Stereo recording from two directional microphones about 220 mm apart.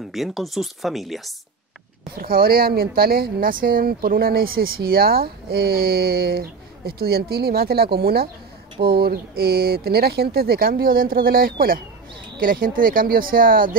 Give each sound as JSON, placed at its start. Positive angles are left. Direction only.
{"t": 0.1, "sound": "speech", "side_deg": 0}
{"t": 2.1, "sound": "speech", "side_deg": -40}